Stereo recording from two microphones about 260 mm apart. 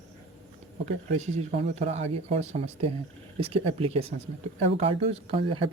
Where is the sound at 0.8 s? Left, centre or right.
Right.